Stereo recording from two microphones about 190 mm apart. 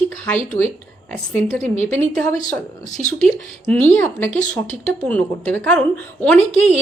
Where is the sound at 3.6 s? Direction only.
10° left (ahead or behind).